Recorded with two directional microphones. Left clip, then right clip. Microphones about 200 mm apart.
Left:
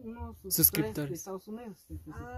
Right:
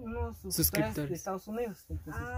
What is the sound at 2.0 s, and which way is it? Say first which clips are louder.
Speech: right 5 dB; 10° right (ahead or behind).